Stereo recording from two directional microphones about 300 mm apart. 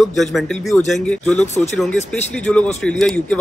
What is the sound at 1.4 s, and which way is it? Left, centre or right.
Speech, left.